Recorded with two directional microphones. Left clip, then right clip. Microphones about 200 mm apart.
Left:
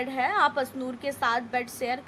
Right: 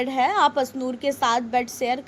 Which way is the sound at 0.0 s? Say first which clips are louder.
Right 5 dB; 20° right (ahead or behind).